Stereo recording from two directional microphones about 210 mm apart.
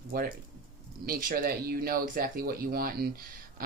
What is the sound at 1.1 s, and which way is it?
Speech, 40° right (ahead or behind).